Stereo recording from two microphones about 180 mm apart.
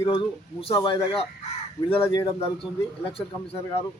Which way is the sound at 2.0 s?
15° left (ahead or behind).